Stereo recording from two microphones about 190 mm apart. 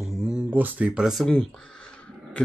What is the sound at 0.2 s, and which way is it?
Speech, 5° right (ahead or behind).